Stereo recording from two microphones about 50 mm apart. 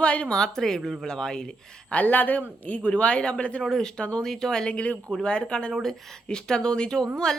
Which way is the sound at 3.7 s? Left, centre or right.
Centre.